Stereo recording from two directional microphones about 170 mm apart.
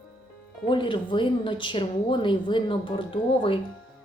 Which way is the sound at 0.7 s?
30° left (ahead or behind).